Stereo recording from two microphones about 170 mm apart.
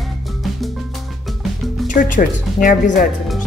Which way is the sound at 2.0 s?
50° left (ahead or behind).